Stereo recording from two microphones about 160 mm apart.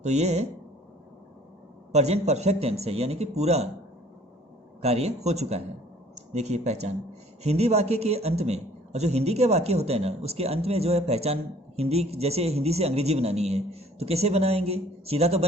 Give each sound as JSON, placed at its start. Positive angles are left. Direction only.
{"t": 0.0, "sound": "a man's voice", "side_deg": -45}
{"t": 1.9, "sound": "a man's voice", "side_deg": -45}
{"t": 4.8, "sound": "a man's voice", "side_deg": -40}